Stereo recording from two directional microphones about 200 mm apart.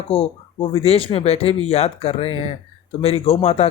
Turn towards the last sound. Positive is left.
turn(degrees=30)  # may be behind; listen again after turning